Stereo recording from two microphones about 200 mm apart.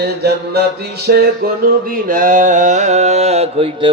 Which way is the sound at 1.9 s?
45° right (ahead or behind).